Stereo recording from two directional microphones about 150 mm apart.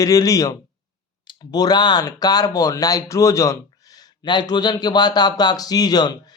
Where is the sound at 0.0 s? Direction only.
25° left (ahead or behind).